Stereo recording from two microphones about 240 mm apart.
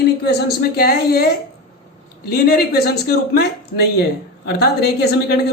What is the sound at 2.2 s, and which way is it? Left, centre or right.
A woman's voice, left.